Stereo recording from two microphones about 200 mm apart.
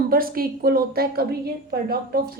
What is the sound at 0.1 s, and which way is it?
A woman's voice, 45° right (ahead or behind).